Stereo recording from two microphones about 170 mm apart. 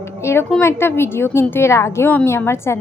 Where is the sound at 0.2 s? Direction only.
15° left (ahead or behind).